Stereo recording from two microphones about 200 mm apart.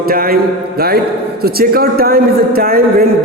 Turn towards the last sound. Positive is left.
turn(degrees=-50)  # may be behind; listen again after turning